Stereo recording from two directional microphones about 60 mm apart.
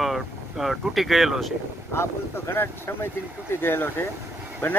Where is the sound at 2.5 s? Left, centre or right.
Left.